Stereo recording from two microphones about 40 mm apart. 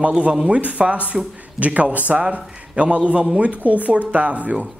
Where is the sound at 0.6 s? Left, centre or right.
Right.